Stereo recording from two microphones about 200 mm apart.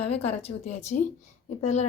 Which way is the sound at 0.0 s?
30° left (ahead or behind).